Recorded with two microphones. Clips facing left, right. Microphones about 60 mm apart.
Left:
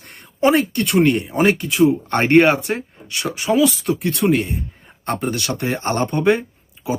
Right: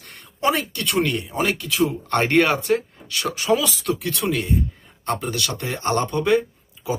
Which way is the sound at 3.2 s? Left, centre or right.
Centre.